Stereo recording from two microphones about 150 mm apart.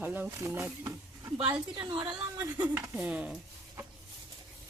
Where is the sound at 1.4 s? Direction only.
35° right (ahead or behind).